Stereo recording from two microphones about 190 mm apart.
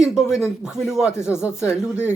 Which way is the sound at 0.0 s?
Centre (ahead or behind).